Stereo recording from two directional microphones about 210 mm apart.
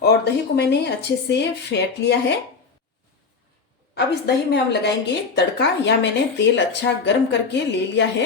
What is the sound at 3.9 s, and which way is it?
A woman's voice, 55° left (ahead or behind).